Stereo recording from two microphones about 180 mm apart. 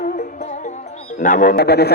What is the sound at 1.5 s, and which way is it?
Speech, 65° left (ahead or behind).